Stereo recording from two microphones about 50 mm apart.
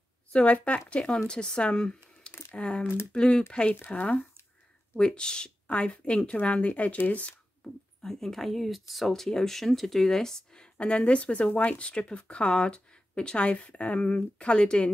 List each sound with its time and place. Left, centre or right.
0.3 s speech: left
3.9 s speech: left
4.9 s speech: centre
8.0 s speech: centre